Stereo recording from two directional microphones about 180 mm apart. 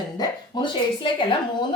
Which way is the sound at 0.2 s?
25° left (ahead or behind).